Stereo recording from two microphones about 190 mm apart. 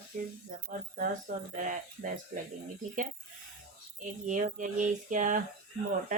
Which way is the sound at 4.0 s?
40° right (ahead or behind).